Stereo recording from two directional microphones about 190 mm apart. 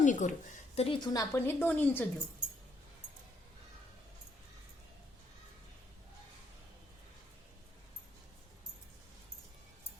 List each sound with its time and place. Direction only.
0.0 s a woman's voice: 40° left (ahead or behind); by 2.0 s 10° left (ahead or behind)